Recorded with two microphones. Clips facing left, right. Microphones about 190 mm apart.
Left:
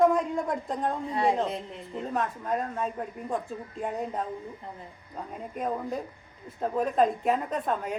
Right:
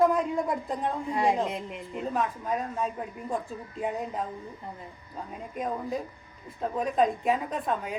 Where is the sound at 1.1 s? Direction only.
15° right (ahead or behind).